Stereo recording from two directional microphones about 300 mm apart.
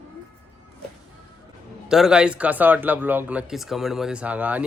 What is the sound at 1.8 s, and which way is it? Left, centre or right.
Speech, centre.